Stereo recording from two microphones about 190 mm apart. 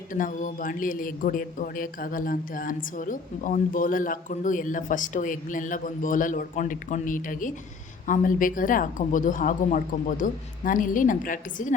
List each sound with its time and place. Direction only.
0.1 s speech: 45° left (ahead or behind)